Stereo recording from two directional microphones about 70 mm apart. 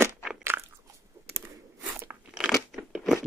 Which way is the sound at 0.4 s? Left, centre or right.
Right.